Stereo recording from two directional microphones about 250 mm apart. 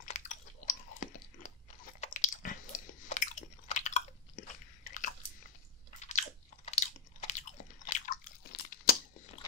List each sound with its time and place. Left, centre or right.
0.0 s chewing: left
5.9 s chewing: left